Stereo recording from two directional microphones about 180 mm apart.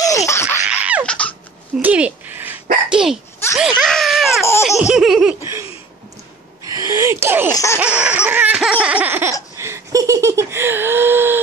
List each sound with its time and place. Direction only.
0.0 s laughter: 20° left (ahead or behind)
0.7 s a sound: 5° right (ahead or behind)
1.0 s a sound: 5° left (ahead or behind)
1.8 s a child's voice: 10° right (ahead or behind)
3.5 s laughter: 5° right (ahead or behind)
5.4 s laughter: 15° right (ahead or behind)
6.7 s a sound: 20° right (ahead or behind)
7.5 s baby laughter: 15° left (ahead or behind)
7.8 s laughter: 5° right (ahead or behind)
9.6 s giggle: 15° right (ahead or behind)